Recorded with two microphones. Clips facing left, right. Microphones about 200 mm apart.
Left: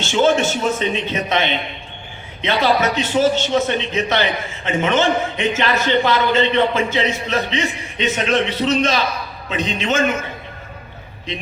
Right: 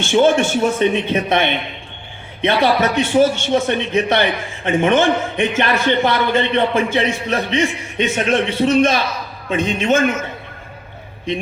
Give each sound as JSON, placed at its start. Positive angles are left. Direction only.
{"t": 0.0, "sound": "a man's voice", "side_deg": -55}